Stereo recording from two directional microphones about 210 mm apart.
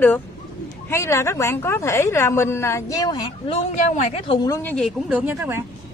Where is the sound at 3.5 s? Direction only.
35° left (ahead or behind).